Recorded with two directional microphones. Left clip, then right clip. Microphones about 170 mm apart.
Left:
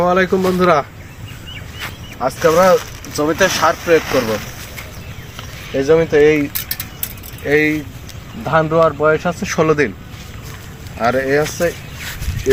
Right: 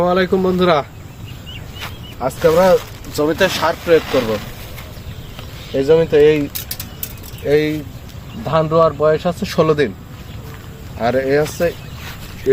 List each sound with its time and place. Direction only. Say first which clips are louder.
0.0 s speech: left 1 dB; 10° right (ahead or behind)
1.8 s a sound: left 2 dB; 15° right (ahead or behind)
3.6 s speech: left 1 dB; 15° right (ahead or behind)
5.9 s speech: even; 25° right (ahead or behind)
6.2 s mechanisms: even; 50° right (ahead or behind)
7.4 s speech: left 1 dB; 60° right (ahead or behind)
8.6 s speech: right 2 dB; 15° right (ahead or behind)
9.0 s speech: left 1 dB; 45° right (ahead or behind)
10.9 s speech: even; 20° right (ahead or behind)
11.4 s a sound: even; 5° right (ahead or behind)